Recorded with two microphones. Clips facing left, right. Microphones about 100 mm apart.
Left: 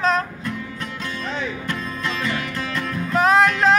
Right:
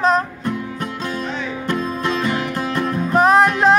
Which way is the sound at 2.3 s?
45° right (ahead or behind).